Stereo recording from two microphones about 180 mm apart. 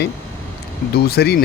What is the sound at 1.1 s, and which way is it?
Speech, 60° left (ahead or behind).